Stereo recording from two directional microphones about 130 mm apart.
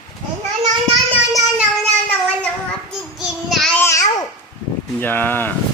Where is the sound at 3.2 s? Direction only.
Centre (ahead or behind).